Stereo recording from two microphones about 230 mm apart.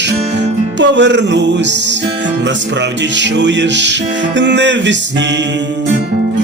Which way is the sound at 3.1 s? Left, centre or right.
Right.